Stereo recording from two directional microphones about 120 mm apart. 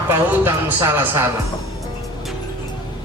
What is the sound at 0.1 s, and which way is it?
Speech, 20° right (ahead or behind).